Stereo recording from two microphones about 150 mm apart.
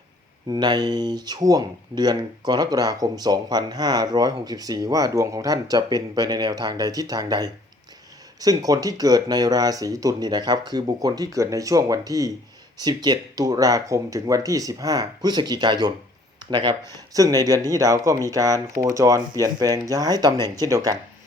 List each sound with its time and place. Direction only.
0.4 s speech: 30° right (ahead or behind)